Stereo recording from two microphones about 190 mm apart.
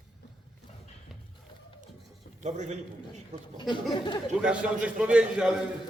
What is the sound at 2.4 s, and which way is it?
Speech, 40° right (ahead or behind).